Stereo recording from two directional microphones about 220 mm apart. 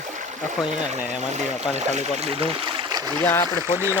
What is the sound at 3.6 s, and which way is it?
Speech, 10° right (ahead or behind).